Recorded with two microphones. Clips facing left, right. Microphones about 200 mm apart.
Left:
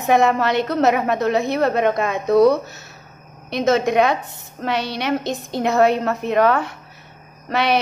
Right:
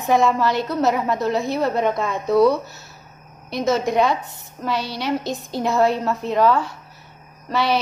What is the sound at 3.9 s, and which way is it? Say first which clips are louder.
Speech: left 2 dB; 65° left (ahead or behind).